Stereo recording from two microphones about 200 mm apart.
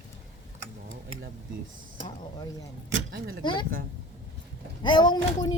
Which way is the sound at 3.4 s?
20° left (ahead or behind).